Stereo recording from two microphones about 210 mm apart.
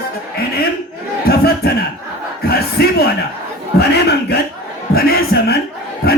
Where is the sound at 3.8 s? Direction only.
50° left (ahead or behind).